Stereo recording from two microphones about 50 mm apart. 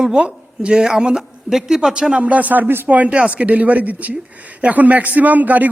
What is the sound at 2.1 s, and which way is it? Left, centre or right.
A man's voice, right.